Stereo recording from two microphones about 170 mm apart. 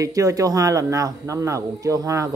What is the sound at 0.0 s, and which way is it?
Speech, 20° right (ahead or behind).